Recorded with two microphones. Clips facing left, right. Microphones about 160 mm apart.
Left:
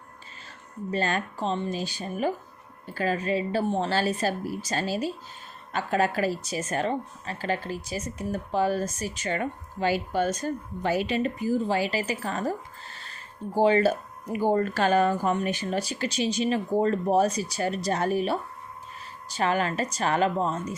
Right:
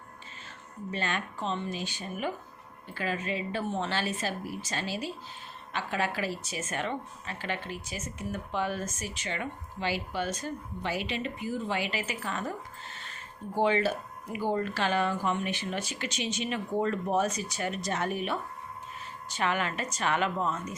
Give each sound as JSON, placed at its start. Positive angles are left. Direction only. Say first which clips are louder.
{"t": 0.9, "sound": "speech", "louder": "left 6 dB", "side_deg": 40}